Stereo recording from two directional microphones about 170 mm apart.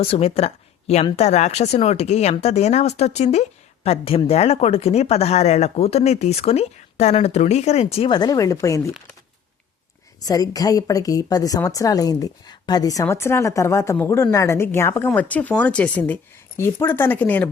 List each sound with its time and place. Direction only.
0.0 s speech: 35° left (ahead or behind); by 8.8 s 20° left (ahead or behind)
10.2 s a woman's voice: 20° left (ahead or behind)